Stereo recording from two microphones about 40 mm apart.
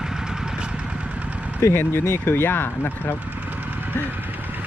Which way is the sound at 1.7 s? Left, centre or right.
Left.